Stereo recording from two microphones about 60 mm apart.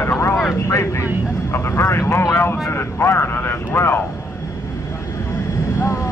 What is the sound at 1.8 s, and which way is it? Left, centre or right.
Vehicle, left.